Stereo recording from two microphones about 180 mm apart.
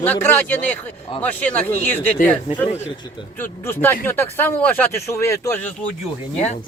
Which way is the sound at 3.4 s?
10° left (ahead or behind).